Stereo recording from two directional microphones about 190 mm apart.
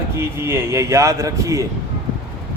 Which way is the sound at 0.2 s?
15° right (ahead or behind).